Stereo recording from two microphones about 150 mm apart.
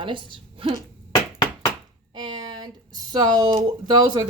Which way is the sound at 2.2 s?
30° right (ahead or behind).